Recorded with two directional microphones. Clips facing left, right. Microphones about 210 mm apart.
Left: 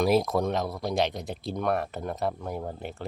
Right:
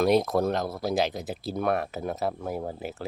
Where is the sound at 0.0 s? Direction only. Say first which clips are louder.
Right 1 dB; centre (ahead or behind).